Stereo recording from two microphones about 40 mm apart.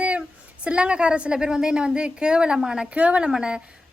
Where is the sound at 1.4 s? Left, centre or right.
Centre.